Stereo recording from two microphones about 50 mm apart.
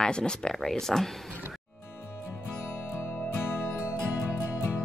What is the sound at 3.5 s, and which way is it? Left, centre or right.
Music, left.